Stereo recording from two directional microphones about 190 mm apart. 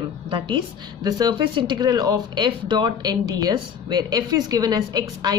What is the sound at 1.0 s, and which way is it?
Speech, 20° right (ahead or behind).